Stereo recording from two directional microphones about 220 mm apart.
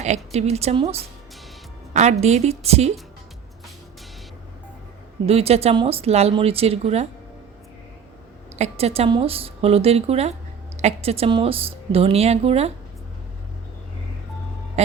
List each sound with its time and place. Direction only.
0.0 s speech: 30° right (ahead or behind)
5.2 s speech: 25° right (ahead or behind)
8.5 s speech: 30° right (ahead or behind)
14.8 s hum: 30° right (ahead or behind)